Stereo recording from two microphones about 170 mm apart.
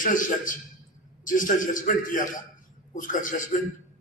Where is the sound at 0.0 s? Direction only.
50° left (ahead or behind).